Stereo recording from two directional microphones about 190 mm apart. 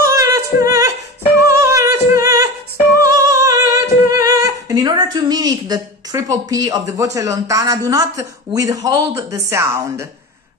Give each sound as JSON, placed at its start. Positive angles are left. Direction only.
{"t": 0.0, "sound": "music", "side_deg": -15}
{"t": 1.6, "sound": "a sound", "side_deg": -15}
{"t": 3.0, "sound": "humming", "side_deg": -15}